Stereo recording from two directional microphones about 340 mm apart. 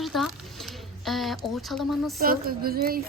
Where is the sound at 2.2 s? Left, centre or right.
Right.